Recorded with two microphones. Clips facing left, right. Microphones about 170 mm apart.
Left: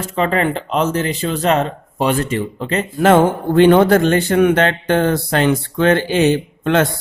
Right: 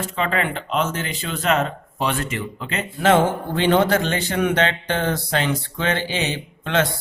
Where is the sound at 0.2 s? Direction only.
35° left (ahead or behind).